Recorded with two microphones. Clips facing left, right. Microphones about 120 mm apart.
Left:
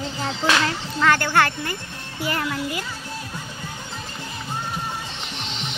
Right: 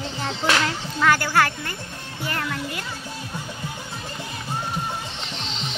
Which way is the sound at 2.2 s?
5° left (ahead or behind).